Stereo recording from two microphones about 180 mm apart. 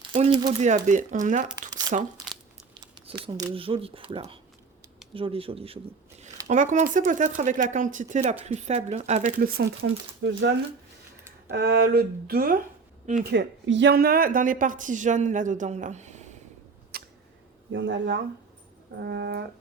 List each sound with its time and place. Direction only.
0.1 s speech: 25° right (ahead or behind)
0.9 s speech: 45° right (ahead or behind)
2.8 s speech: 25° right (ahead or behind)
6.5 s speech: 45° right (ahead or behind)
9.4 s speech: 55° right (ahead or behind)
10.2 s speech: 90° right
11.2 s tick: 15° right (ahead or behind)
11.5 s speech: 65° right (ahead or behind)
13.2 s speech: 75° right (ahead or behind); by 16.4 s 40° right (ahead or behind)
16.9 s a sound: 55° right (ahead or behind)
17.7 s speech: 90° right
18.9 s brass instrument: 70° right (ahead or behind)